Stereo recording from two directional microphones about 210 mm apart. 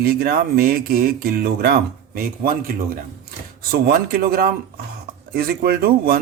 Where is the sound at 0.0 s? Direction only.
45° right (ahead or behind).